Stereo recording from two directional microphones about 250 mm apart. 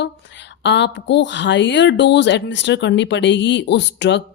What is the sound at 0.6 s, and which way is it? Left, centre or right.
Speech, left.